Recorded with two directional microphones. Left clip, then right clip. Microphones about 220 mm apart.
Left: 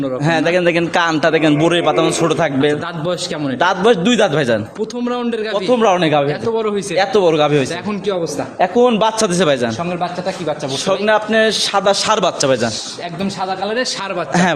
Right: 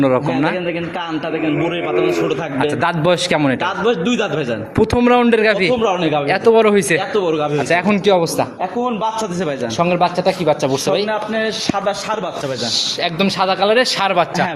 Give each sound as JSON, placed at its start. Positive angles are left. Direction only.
{"t": 0.3, "sound": "a man's voice", "side_deg": 50}
{"t": 2.8, "sound": "a man's voice", "side_deg": -25}
{"t": 3.6, "sound": "a man's voice", "side_deg": 50}
{"t": 4.8, "sound": "a man's voice", "side_deg": -30}
{"t": 5.6, "sound": "a man's voice", "side_deg": 45}
{"t": 6.4, "sound": "a man's voice", "side_deg": -30}
{"t": 7.1, "sound": "a man's voice", "side_deg": 50}
{"t": 7.7, "sound": "a man's voice", "side_deg": -30}
{"t": 8.8, "sound": "a man's voice", "side_deg": 50}
{"t": 10.0, "sound": "a man's voice", "side_deg": -40}
{"t": 11.0, "sound": "a man's voice", "side_deg": 50}
{"t": 13.4, "sound": "a man's voice", "side_deg": -30}